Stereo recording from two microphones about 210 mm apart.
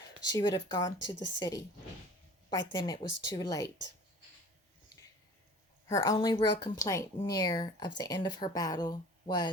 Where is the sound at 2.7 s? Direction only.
20° left (ahead or behind).